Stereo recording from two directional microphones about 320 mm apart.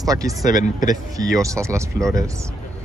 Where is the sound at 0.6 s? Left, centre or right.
Left.